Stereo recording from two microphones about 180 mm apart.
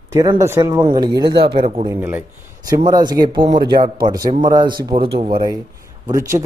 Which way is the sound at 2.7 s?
20° right (ahead or behind).